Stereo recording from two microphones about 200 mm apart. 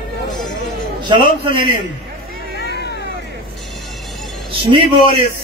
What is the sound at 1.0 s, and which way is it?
Speech, 25° right (ahead or behind).